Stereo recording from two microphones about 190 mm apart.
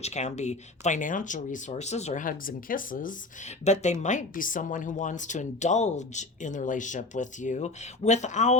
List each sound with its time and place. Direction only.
0.0 s speech: 35° left (ahead or behind)